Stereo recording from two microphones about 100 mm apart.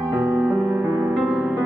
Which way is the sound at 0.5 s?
25° right (ahead or behind).